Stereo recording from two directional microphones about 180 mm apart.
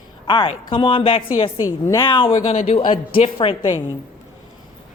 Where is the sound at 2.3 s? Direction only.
40° left (ahead or behind); by 3.8 s 25° left (ahead or behind).